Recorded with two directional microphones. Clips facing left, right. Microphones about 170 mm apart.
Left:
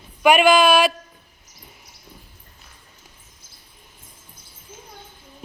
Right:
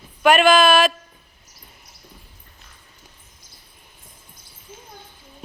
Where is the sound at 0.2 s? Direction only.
10° left (ahead or behind).